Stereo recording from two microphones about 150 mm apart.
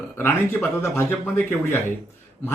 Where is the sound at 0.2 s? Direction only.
15° left (ahead or behind).